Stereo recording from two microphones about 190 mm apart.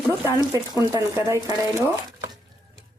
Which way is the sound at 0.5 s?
20° right (ahead or behind).